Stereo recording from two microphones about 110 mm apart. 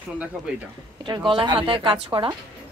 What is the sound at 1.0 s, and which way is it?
Speech, 50° right (ahead or behind).